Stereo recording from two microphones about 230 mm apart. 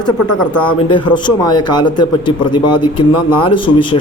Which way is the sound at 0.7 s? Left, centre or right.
Left.